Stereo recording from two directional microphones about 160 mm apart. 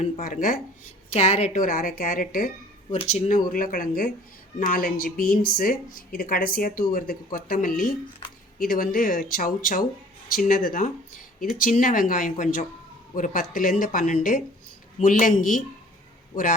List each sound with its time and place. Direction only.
0.0 s a woman's voice: 55° left (ahead or behind)
1.1 s a woman's voice: 40° left (ahead or behind)
1.5 s a woman's voice: 60° left (ahead or behind)
2.9 s a woman's voice: 40° left (ahead or behind)